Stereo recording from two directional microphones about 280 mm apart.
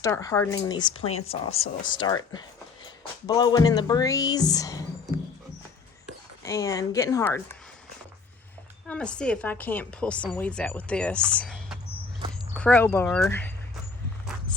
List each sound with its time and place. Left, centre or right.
0.0 s speech: centre
6.4 s speech: centre
8.9 s speech: centre